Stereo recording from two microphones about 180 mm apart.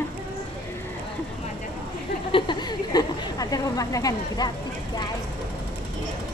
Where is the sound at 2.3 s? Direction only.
25° left (ahead or behind).